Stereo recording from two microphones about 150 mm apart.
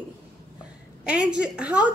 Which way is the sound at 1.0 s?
5° right (ahead or behind).